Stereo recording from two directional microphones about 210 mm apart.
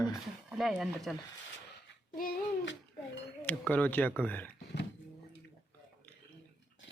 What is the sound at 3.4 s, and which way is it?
Speech, 5° left (ahead or behind).